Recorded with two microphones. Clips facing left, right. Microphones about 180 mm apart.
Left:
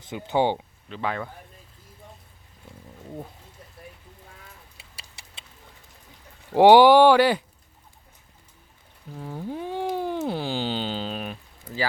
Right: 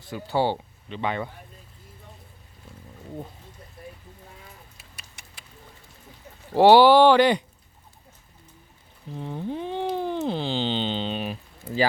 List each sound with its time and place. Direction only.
0.0 s speech: 20° left (ahead or behind)
0.9 s speech: centre (ahead or behind)
4.8 s vehicle: 30° left (ahead or behind)
5.2 s a sound: 30° left (ahead or behind)
6.5 s speech: 15° left (ahead or behind)
9.1 s a sound: 5° left (ahead or behind)